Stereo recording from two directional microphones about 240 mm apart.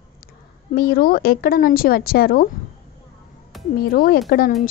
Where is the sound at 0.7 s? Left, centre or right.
Left.